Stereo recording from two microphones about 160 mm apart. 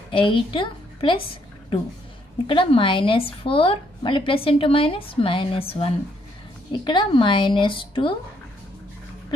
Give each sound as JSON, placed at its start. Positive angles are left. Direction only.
{"t": 0.1, "sound": "a woman's voice", "side_deg": 30}